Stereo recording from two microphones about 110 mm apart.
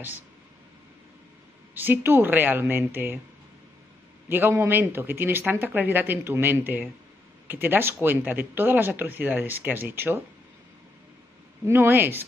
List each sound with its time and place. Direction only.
1.7 s speech: 20° right (ahead or behind)
4.3 s speech: 20° right (ahead or behind)
11.6 s speech: 20° right (ahead or behind)